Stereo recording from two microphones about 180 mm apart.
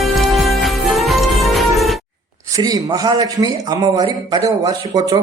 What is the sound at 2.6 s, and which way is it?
A man's voice, 20° right (ahead or behind).